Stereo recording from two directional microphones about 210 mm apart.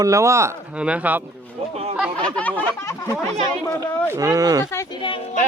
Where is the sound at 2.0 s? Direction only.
5° left (ahead or behind).